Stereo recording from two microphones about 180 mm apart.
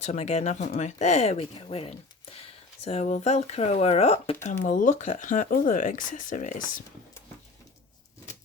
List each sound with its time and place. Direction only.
0.0 s speech: 40° left (ahead or behind)